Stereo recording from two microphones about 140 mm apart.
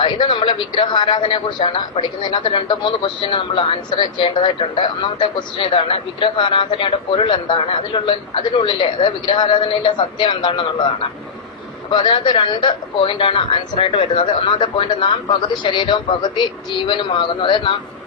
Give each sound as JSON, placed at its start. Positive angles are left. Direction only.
{"t": 0.0, "sound": "a man's voice", "side_deg": 35}
{"t": 11.9, "sound": "a man's voice", "side_deg": 35}